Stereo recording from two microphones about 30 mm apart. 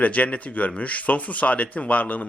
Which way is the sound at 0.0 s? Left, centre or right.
Left.